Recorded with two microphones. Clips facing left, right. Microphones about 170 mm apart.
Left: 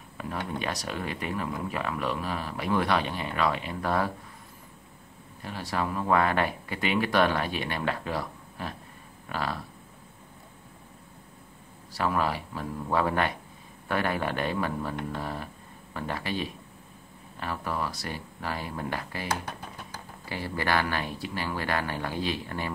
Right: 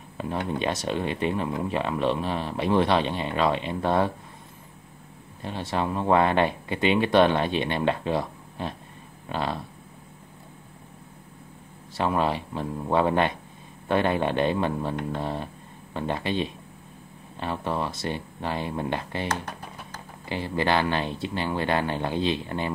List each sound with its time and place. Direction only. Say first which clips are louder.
0.2 s speech: right 5 dB; 25° right (ahead or behind)
5.4 s speech: right 3 dB; 25° right (ahead or behind)
11.9 s speech: right 3 dB; 25° right (ahead or behind)
19.4 s music: right 1 dB; 5° left (ahead or behind)
20.2 s speech: right 4 dB; 20° right (ahead or behind)